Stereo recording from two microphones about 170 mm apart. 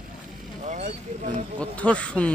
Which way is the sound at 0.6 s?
45° right (ahead or behind).